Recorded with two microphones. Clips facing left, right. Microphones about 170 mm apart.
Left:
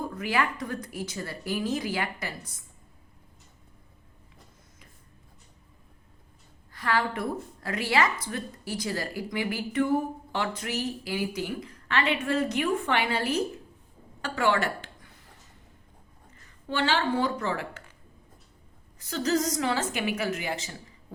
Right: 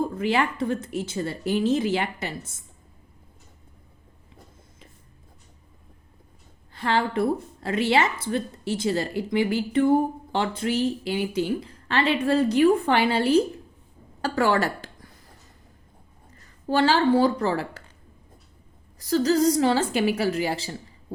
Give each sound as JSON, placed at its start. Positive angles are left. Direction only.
{"t": 0.0, "sound": "speech", "side_deg": -25}
{"t": 6.7, "sound": "speech", "side_deg": -30}
{"t": 14.2, "sound": "a sound", "side_deg": -35}
{"t": 16.6, "sound": "a woman's voice", "side_deg": -35}
{"t": 18.9, "sound": "a woman's voice", "side_deg": -35}